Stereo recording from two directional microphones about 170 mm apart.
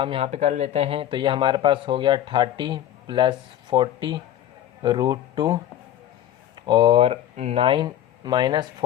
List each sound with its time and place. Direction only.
0.0 s speech: 35° right (ahead or behind)
6.6 s speech: 25° right (ahead or behind)